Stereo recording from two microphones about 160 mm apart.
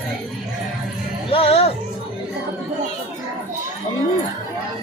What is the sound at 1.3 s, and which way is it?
Music, 35° left (ahead or behind).